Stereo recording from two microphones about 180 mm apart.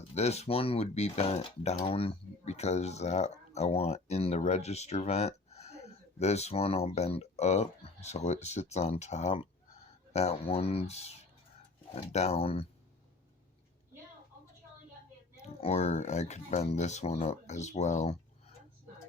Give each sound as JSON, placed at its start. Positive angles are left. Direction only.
{"t": 0.1, "sound": "speech", "side_deg": 35}
{"t": 15.4, "sound": "speech", "side_deg": 35}